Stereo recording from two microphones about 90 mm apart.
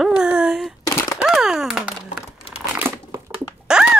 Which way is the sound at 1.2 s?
5° right (ahead or behind).